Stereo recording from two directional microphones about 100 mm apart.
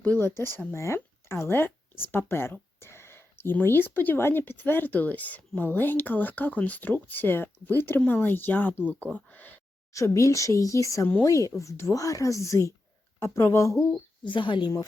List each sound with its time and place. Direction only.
0.0 s speech: 20° left (ahead or behind)
9.9 s speech: 30° left (ahead or behind)
14.3 s a woman's voice: 55° left (ahead or behind)